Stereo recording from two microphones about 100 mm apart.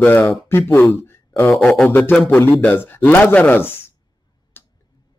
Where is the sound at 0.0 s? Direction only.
20° left (ahead or behind).